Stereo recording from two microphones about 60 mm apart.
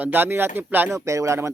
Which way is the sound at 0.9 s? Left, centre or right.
Right.